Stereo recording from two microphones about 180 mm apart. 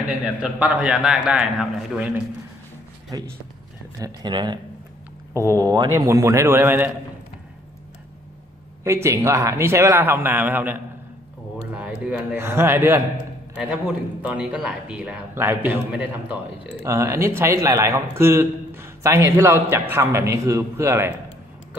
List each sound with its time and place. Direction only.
0.4 s a man's voice: 5° right (ahead or behind)
3.1 s a man's voice: 20° right (ahead or behind)
8.8 s a man's voice: 15° right (ahead or behind)